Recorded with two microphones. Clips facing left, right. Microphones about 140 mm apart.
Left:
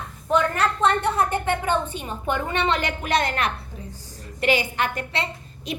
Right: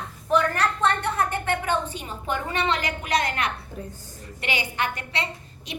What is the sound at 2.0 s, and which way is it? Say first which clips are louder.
A woman's voice: left 3 dB; 25° left (ahead or behind).